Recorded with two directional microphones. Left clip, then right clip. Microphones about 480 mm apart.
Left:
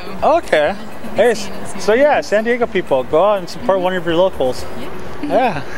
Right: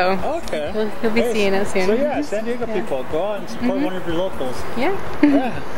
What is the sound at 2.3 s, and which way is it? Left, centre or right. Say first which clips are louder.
Speech: left 8 dB; left.